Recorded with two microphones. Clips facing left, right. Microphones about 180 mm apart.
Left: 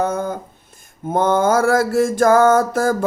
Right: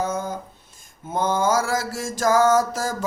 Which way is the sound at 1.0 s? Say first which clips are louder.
Left 6 dB; 55° left (ahead or behind).